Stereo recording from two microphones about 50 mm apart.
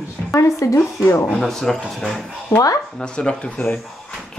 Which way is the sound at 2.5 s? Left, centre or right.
Left.